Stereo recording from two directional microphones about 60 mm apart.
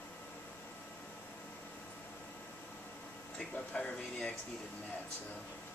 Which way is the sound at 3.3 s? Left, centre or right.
Centre.